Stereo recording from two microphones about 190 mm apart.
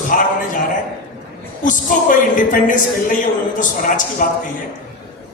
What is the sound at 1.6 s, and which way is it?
A woman's voice, 45° left (ahead or behind).